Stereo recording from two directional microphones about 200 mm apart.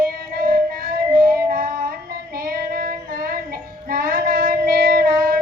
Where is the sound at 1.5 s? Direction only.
45° right (ahead or behind).